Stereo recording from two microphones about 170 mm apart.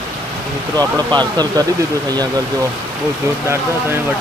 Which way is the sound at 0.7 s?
25° right (ahead or behind).